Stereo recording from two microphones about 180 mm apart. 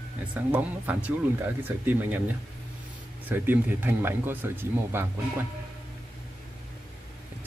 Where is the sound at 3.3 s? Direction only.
10° right (ahead or behind).